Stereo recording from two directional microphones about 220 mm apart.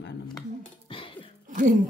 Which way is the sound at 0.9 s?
25° left (ahead or behind).